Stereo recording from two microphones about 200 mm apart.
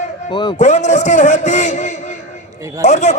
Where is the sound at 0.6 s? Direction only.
35° left (ahead or behind).